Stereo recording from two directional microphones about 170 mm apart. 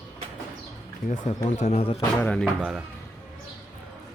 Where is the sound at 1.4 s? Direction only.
45° left (ahead or behind).